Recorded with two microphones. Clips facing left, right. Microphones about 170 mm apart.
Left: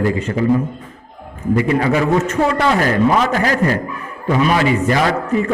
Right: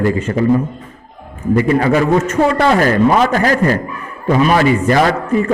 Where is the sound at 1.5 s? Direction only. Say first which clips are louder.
Right 3 dB; 45° right (ahead or behind).